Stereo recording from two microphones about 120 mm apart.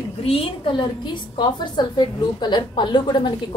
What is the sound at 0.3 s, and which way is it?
A woman's voice, 45° left (ahead or behind).